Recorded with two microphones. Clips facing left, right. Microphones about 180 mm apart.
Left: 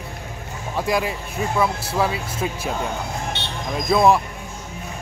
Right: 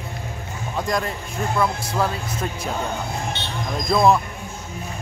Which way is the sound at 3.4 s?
70° left (ahead or behind).